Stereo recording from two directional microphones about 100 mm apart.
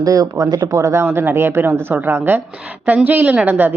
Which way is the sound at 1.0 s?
20° right (ahead or behind).